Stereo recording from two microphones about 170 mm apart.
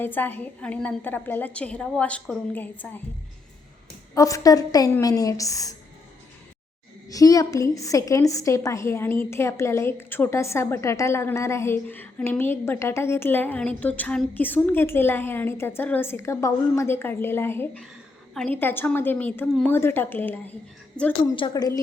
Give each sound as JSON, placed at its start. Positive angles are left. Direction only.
{"t": 0.0, "sound": "a woman's voice", "side_deg": 10}
{"t": 4.1, "sound": "a woman's voice", "side_deg": 20}
{"t": 7.1, "sound": "a woman's voice", "side_deg": 20}
{"t": 21.3, "sound": "a woman's voice", "side_deg": 25}